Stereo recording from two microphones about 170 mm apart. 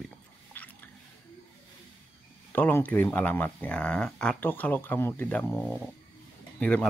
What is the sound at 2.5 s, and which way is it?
Speech, 10° left (ahead or behind).